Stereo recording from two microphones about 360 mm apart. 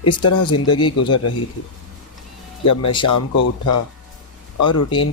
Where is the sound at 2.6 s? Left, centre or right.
Left.